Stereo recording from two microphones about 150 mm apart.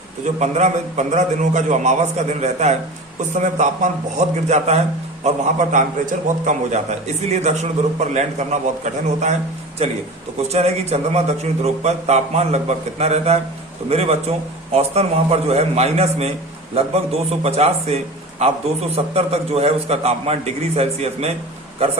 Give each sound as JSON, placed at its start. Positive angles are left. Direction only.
{"t": 0.3, "sound": "a man's voice", "side_deg": -50}